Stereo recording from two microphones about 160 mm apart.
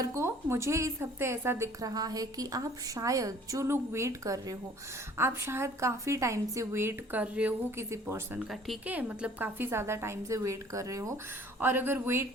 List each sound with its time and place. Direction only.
0.0 s a woman's voice: 15° right (ahead or behind)
8.4 s a woman's voice: centre (ahead or behind)